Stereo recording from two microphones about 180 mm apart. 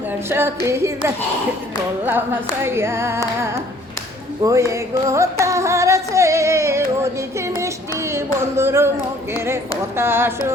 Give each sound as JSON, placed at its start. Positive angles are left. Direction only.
{"t": 0.3, "sound": "singing", "side_deg": -15}
{"t": 4.4, "sound": "music", "side_deg": -15}
{"t": 8.1, "sound": "singing", "side_deg": -15}
{"t": 10.0, "sound": "singing", "side_deg": -10}